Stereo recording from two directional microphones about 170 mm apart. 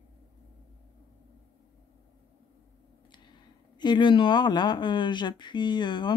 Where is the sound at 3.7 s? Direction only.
25° left (ahead or behind).